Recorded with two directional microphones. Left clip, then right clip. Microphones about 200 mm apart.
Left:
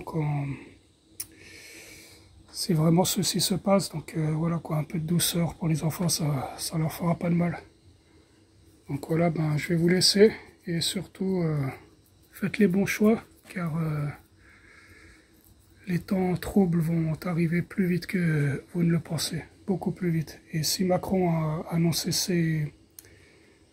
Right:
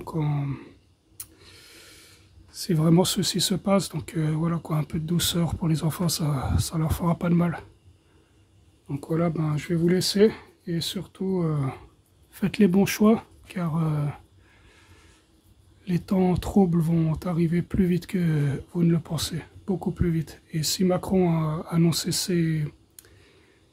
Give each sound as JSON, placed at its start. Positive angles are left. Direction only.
{"t": 0.1, "sound": "speech", "side_deg": -25}
{"t": 1.5, "sound": "snort", "side_deg": -10}
{"t": 2.6, "sound": "speech", "side_deg": -15}
{"t": 8.8, "sound": "speech", "side_deg": -10}
{"t": 16.3, "sound": "speech", "side_deg": -20}
{"t": 16.9, "sound": "speech", "side_deg": -30}
{"t": 17.2, "sound": "speech", "side_deg": -15}
{"t": 21.1, "sound": "speech", "side_deg": -30}
{"t": 21.4, "sound": "speech", "side_deg": -15}